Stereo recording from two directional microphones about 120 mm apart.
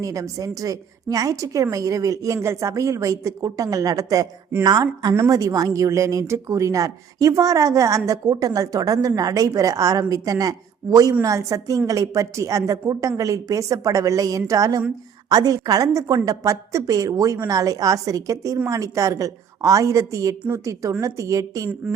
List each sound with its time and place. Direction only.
0.0 s a woman's voice: 30° right (ahead or behind)